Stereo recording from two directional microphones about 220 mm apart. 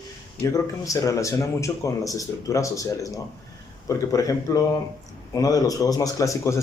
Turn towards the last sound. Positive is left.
turn(degrees=15)  # may be behind; listen again after turning